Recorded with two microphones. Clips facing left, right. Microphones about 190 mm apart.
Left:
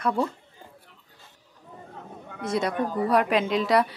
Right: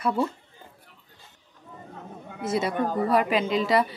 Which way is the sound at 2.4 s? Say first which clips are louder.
Even; 5° right (ahead or behind).